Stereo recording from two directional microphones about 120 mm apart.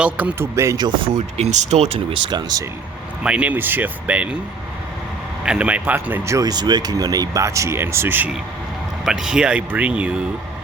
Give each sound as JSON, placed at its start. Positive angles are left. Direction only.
{"t": 0.0, "sound": "speech", "side_deg": -10}
{"t": 1.4, "sound": "speech", "side_deg": -75}
{"t": 2.2, "sound": "speech", "side_deg": -35}
{"t": 3.2, "sound": "speech", "side_deg": -10}
{"t": 5.5, "sound": "speech", "side_deg": -10}
{"t": 9.0, "sound": "speech", "side_deg": -5}